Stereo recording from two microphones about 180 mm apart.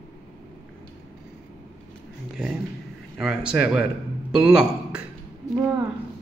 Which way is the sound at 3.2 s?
5° right (ahead or behind).